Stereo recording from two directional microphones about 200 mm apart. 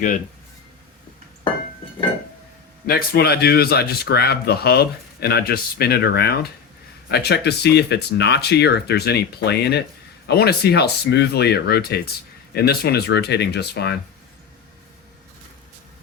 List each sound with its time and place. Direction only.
2.8 s speech: 50° left (ahead or behind)